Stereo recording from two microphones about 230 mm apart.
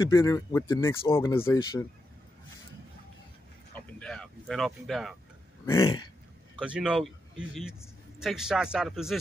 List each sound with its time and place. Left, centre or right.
0.0 s speech: centre
4.0 s speech: centre
5.7 s speech: centre
6.5 s a man's voice: centre